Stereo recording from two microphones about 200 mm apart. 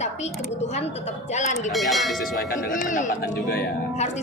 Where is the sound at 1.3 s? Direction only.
35° left (ahead or behind).